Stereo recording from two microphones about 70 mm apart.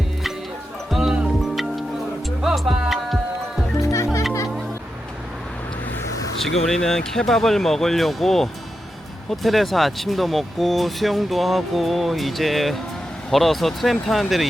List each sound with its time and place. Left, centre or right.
0.9 s music: centre
3.8 s music: left
6.4 s speech: centre